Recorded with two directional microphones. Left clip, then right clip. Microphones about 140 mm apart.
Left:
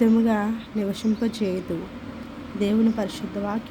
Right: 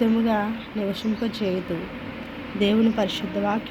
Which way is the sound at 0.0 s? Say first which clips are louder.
Left 1 dB; 45° left (ahead or behind).